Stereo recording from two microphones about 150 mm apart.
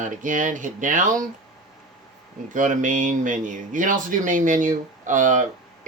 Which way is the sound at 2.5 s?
60° right (ahead or behind).